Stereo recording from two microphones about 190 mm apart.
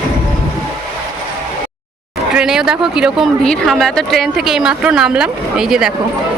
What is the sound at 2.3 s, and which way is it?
Speech, 5° right (ahead or behind).